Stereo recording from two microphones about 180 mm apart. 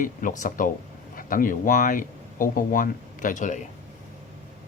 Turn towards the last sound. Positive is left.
turn(degrees=45)  # may be behind; listen again after turning